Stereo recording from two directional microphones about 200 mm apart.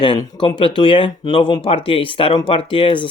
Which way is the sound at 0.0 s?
25° left (ahead or behind).